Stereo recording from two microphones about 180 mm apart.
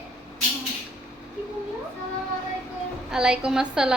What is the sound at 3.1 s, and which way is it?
Speech, 5° right (ahead or behind).